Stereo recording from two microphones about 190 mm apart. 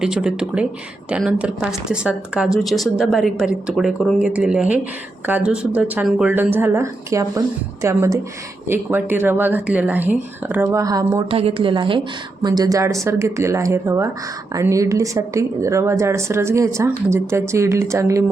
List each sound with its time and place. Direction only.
0.0 s speech: 5° right (ahead or behind); by 11.3 s 20° right (ahead or behind)
11.3 s speech: 30° right (ahead or behind)